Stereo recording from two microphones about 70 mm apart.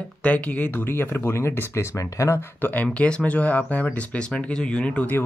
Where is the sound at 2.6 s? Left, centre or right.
Left.